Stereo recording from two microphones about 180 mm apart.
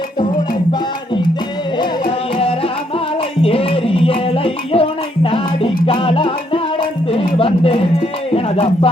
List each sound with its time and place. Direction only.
1.8 s music: 30° left (ahead or behind)
7.3 s speech: 30° left (ahead or behind)